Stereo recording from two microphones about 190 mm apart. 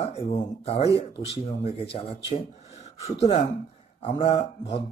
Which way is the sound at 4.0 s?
30° left (ahead or behind).